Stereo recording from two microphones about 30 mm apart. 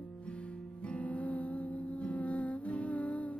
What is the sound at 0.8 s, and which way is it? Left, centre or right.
Music, left.